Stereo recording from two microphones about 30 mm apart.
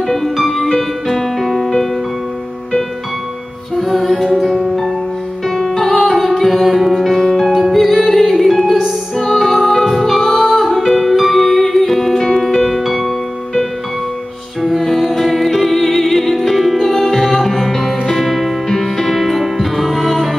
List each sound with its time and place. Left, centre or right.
0.0 s music: centre
3.7 s music: centre
7.1 s music: centre
7.5 s music: centre
7.8 s music: centre
14.6 s music: centre